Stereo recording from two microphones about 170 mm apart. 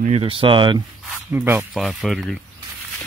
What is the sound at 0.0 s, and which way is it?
Speech, 35° right (ahead or behind).